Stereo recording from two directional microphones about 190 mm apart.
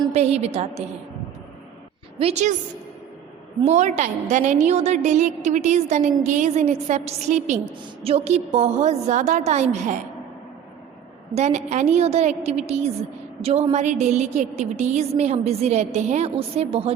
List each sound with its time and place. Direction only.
0.1 s a woman's voice: 35° right (ahead or behind)
2.1 s a woman's voice: 35° right (ahead or behind)
3.6 s a woman's voice: 35° right (ahead or behind)
11.3 s a woman's voice: 35° right (ahead or behind)